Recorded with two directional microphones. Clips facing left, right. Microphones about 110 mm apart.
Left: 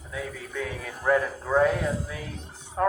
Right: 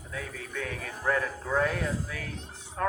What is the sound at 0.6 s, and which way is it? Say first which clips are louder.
Speech: left 3 dB; 15° left (ahead or behind).